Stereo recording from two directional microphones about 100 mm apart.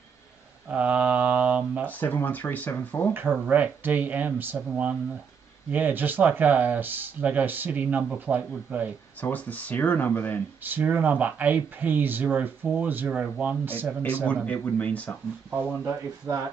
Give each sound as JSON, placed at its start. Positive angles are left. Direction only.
{"t": 0.7, "sound": "mantra", "side_deg": -15}
{"t": 1.9, "sound": "speech", "side_deg": 20}
{"t": 3.1, "sound": "speech", "side_deg": -20}
{"t": 9.2, "sound": "speech", "side_deg": 15}
{"t": 10.6, "sound": "speech", "side_deg": -15}
{"t": 14.2, "sound": "speech", "side_deg": 15}
{"t": 15.8, "sound": "speech", "side_deg": -25}